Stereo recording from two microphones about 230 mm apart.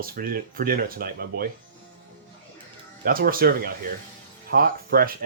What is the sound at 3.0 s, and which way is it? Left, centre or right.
Speech, right.